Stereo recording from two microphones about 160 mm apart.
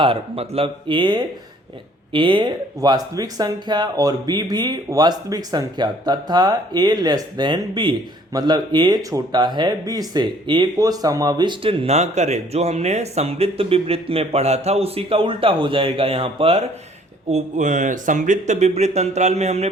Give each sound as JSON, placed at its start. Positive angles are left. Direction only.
{"t": 0.0, "sound": "speech", "side_deg": -35}
{"t": 17.3, "sound": "speech", "side_deg": -50}